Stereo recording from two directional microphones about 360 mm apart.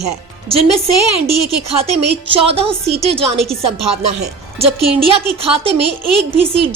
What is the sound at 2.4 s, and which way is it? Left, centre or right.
Speech, centre.